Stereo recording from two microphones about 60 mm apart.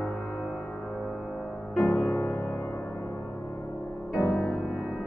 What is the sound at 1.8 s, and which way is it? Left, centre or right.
Music, left.